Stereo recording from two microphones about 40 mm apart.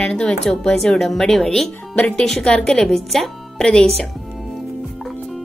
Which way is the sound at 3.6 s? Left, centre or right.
Centre.